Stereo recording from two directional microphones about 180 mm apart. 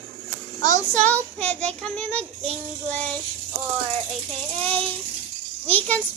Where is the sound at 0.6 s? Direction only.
40° right (ahead or behind).